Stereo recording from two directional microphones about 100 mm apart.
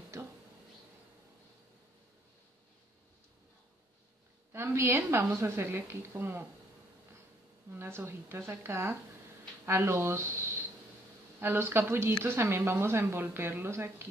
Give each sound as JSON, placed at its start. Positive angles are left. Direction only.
{"t": 0.1, "sound": "a sound", "side_deg": -30}
{"t": 4.5, "sound": "speech", "side_deg": -25}
{"t": 7.7, "sound": "speech", "side_deg": -25}
{"t": 11.4, "sound": "speech", "side_deg": -20}